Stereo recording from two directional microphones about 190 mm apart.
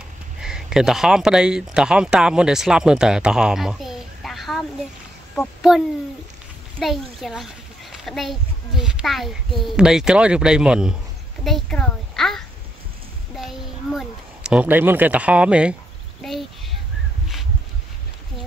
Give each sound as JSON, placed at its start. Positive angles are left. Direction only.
{"t": 0.4, "sound": "a child's voice", "side_deg": -5}
{"t": 13.4, "sound": "a sound", "side_deg": 0}
{"t": 16.2, "sound": "a child's voice", "side_deg": 0}